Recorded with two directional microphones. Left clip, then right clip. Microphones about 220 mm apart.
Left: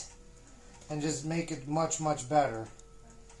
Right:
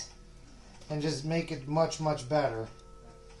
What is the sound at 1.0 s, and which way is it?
Speech, 15° left (ahead or behind).